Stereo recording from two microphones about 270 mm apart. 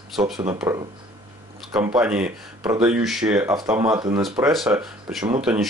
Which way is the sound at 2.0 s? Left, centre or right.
Centre.